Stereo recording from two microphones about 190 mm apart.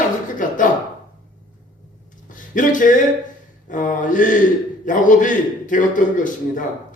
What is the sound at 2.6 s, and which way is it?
Speech, 45° left (ahead or behind).